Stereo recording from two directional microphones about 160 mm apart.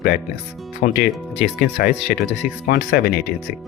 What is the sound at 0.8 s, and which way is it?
Speech, 55° left (ahead or behind).